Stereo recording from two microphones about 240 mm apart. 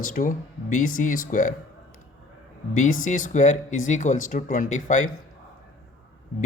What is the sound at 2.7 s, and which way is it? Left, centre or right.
Speech, left.